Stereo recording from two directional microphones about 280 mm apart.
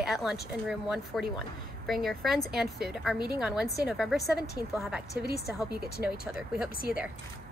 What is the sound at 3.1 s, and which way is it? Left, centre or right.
Speech, centre.